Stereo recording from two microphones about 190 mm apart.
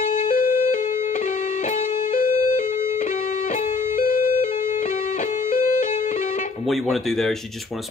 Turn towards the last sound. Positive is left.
turn(degrees=0)  # may be behind; listen again after turning